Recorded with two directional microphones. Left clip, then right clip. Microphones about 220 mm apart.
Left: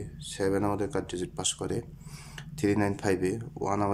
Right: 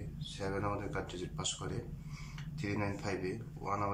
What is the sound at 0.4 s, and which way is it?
Speech, 35° left (ahead or behind).